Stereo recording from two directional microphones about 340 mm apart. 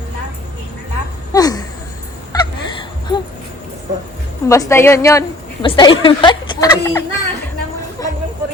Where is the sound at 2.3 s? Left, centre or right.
Centre.